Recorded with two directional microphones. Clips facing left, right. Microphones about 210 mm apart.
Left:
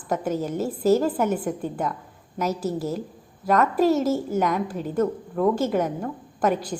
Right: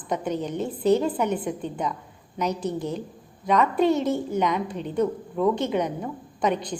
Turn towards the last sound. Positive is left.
turn(degrees=5)  # may be behind; listen again after turning